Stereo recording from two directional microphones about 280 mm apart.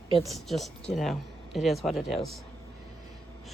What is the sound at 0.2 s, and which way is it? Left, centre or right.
Speech, centre.